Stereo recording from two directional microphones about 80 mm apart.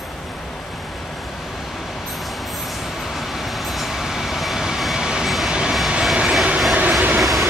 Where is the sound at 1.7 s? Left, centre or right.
Centre.